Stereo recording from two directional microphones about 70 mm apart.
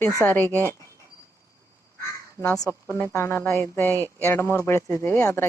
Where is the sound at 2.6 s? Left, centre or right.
Left.